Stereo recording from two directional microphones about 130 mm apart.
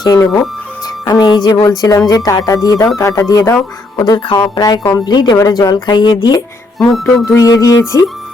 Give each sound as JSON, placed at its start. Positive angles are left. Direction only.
{"t": 0.0, "sound": "speech", "side_deg": 25}